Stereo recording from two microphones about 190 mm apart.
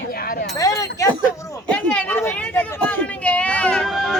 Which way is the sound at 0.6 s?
15° left (ahead or behind).